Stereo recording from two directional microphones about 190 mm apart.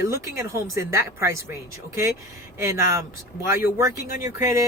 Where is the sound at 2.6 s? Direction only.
15° right (ahead or behind).